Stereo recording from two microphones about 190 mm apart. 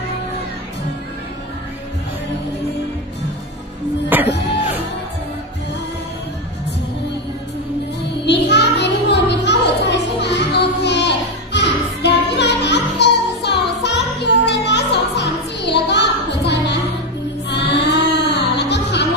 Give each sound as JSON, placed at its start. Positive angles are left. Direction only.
{"t": 4.3, "sound": "music", "side_deg": 65}
{"t": 8.3, "sound": "music", "side_deg": 65}